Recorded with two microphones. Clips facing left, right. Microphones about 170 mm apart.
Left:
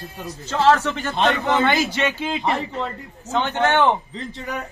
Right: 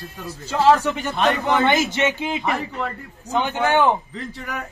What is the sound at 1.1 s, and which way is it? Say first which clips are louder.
Speech: even; 20° left (ahead or behind).